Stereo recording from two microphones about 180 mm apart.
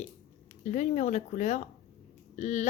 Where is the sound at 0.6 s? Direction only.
40° left (ahead or behind).